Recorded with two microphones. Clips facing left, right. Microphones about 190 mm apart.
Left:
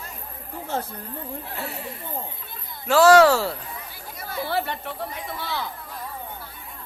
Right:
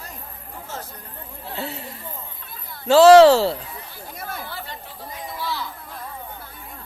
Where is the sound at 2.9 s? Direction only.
25° right (ahead or behind).